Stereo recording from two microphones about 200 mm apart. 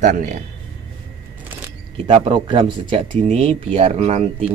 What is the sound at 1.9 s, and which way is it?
Speech, 30° right (ahead or behind).